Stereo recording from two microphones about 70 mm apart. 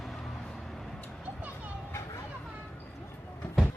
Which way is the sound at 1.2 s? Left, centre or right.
Right.